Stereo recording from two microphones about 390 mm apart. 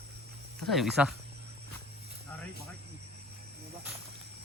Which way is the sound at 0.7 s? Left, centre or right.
Centre.